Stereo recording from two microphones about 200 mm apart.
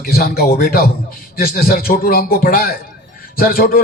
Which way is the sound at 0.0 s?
50° left (ahead or behind).